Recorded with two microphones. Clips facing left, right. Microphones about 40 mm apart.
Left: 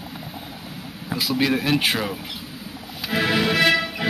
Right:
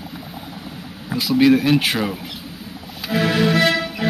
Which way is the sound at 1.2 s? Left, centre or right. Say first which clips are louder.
Right 7 dB; centre.